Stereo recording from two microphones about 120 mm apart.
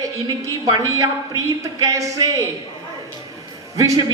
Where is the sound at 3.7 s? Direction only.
25° right (ahead or behind).